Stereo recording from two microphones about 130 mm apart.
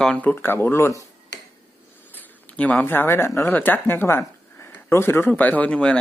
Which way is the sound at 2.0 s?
15° left (ahead or behind).